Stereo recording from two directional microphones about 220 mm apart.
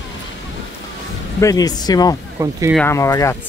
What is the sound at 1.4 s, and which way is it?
Speech, 15° left (ahead or behind).